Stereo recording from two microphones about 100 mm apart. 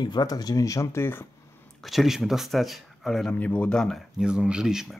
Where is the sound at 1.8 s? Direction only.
Centre (ahead or behind).